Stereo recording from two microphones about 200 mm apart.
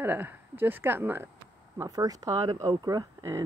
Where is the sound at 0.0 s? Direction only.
10° right (ahead or behind).